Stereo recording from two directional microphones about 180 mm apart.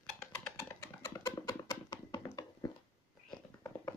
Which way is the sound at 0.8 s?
15° left (ahead or behind).